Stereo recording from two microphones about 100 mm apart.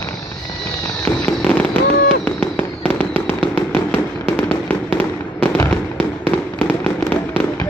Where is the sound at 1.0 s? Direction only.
15° left (ahead or behind).